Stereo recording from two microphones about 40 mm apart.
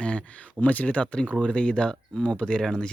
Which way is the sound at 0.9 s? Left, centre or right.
Left.